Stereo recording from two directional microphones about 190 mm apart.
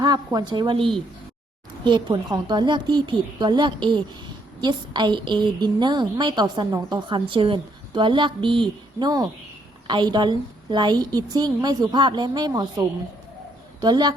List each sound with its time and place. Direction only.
0.0 s a woman's voice: 20° right (ahead or behind)
13.8 s a woman's voice: 25° right (ahead or behind)